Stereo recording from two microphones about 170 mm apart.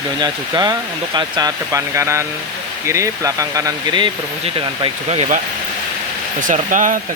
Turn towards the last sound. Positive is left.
turn(degrees=-50)  # may be behind; listen again after turning